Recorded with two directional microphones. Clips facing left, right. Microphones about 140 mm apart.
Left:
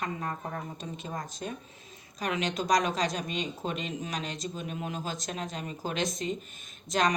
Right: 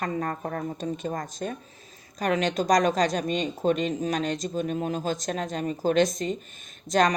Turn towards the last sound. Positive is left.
turn(degrees=-45)  # may be behind; listen again after turning